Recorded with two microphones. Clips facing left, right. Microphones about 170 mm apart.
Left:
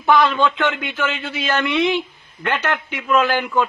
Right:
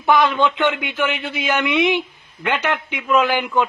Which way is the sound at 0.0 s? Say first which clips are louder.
Even; 15° right (ahead or behind).